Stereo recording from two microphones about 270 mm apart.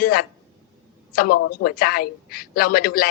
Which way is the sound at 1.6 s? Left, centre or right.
Left.